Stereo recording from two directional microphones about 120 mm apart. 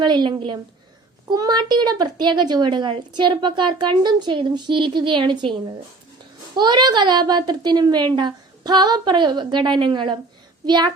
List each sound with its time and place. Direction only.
0.0 s a woman's voice: 40° right (ahead or behind)
1.3 s a woman's voice: 35° right (ahead or behind)
6.6 s a woman's voice: 40° right (ahead or behind)